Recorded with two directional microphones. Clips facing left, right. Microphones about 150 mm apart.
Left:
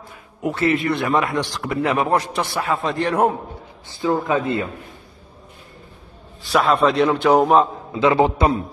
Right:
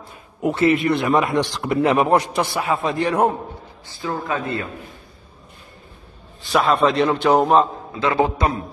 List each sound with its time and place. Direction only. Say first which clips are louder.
0.4 s a man's voice: right 2 dB; 20° right (ahead or behind); by 3.3 s centre (ahead or behind)
4.0 s a man's voice: left 5 dB; 20° left (ahead or behind)
6.5 s a man's voice: even; 5° left (ahead or behind)
8.0 s a man's voice: left 3 dB; 20° left (ahead or behind)